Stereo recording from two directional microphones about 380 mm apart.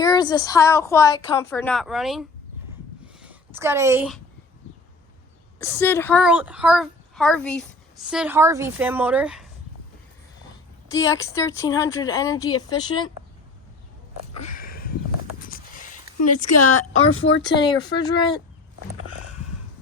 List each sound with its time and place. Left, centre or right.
0.0 s a woman's voice: centre
5.5 s a child's voice: centre
10.8 s a woman's voice: centre
14.3 s a sound: left
15.4 s horse: left
16.5 s a woman's voice: left
17.4 s a woman's voice: centre